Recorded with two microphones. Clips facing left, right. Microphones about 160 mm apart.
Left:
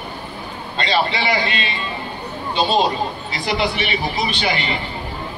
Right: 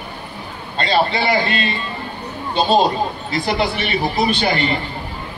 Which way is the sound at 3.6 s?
45° right (ahead or behind).